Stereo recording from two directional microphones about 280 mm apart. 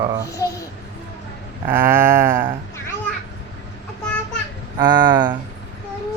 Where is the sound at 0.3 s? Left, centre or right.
Centre.